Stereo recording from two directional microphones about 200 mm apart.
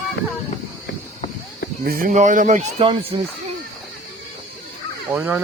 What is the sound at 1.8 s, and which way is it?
Speech, 45° right (ahead or behind).